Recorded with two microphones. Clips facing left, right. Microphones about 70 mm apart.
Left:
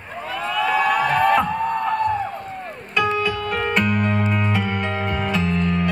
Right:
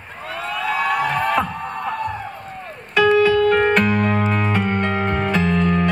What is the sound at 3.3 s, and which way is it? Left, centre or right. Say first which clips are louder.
Music: right 8 dB; right.